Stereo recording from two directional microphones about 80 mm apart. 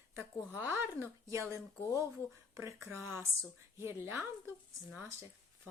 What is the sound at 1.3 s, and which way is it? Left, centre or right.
A woman's voice, right.